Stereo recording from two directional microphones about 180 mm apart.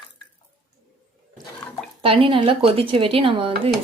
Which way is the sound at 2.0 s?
30° right (ahead or behind).